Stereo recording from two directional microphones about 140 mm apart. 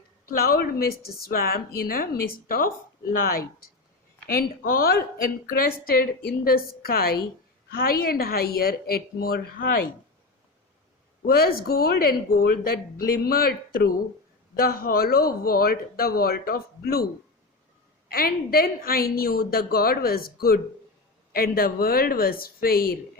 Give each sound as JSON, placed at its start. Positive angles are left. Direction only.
{"t": 0.3, "sound": "speech", "side_deg": 90}
{"t": 11.3, "sound": "speech", "side_deg": 90}
{"t": 13.2, "sound": "speech", "side_deg": 90}
{"t": 18.1, "sound": "speech", "side_deg": 90}